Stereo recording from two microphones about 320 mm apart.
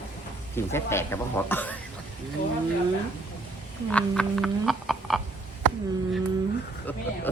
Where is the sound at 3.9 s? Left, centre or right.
Centre.